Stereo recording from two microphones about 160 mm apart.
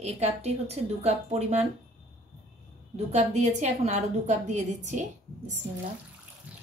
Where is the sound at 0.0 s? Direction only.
45° right (ahead or behind).